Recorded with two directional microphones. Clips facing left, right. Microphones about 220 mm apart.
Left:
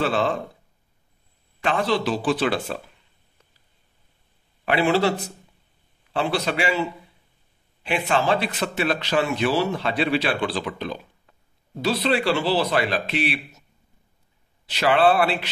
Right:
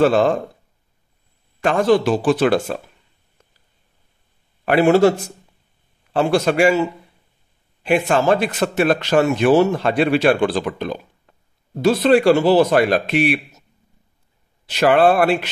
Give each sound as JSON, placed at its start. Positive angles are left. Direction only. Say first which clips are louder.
{"t": 0.0, "sound": "a man's voice", "louder": "right 8 dB", "side_deg": -50}
{"t": 1.6, "sound": "a man's voice", "louder": "right 7 dB", "side_deg": -45}
{"t": 4.6, "sound": "a man's voice", "louder": "right 7 dB", "side_deg": -45}
{"t": 6.1, "sound": "a man's voice", "louder": "right 8 dB", "side_deg": -45}
{"t": 7.8, "sound": "a man's voice", "louder": "right 6 dB", "side_deg": -45}
{"t": 14.7, "sound": "a man's voice", "louder": "right 5 dB", "side_deg": -50}